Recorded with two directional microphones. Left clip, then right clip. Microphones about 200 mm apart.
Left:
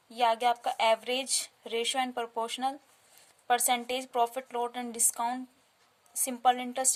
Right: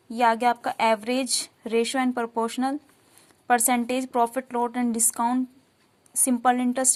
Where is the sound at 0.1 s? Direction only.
15° right (ahead or behind).